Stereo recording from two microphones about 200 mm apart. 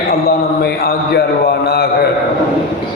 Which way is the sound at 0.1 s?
50° left (ahead or behind).